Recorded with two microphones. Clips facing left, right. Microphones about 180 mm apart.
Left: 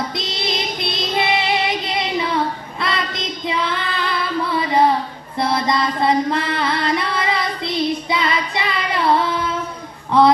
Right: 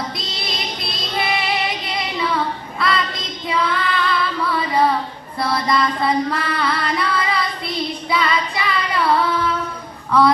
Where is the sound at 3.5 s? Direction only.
25° left (ahead or behind).